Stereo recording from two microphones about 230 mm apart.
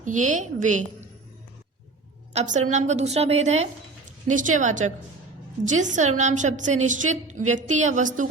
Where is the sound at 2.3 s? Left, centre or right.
Right.